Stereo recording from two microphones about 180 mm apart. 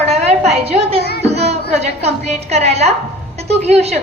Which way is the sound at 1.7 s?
35° right (ahead or behind).